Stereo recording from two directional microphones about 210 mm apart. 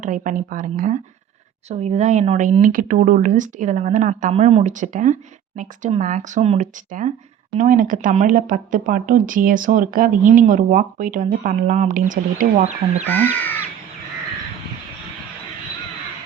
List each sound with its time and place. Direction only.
0.0 s speech: 40° right (ahead or behind)
13.1 s speech: 10° left (ahead or behind)